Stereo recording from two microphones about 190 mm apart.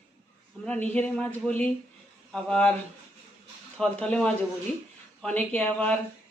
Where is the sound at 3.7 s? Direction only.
5° left (ahead or behind).